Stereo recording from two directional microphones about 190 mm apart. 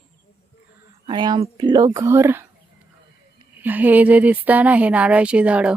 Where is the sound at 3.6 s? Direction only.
10° right (ahead or behind).